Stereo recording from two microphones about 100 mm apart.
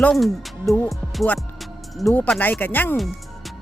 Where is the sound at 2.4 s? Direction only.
20° left (ahead or behind).